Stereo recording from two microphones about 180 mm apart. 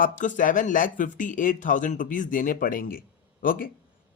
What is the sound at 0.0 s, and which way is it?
Speech, 45° left (ahead or behind).